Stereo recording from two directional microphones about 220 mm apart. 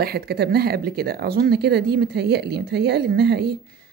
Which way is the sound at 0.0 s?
45° right (ahead or behind).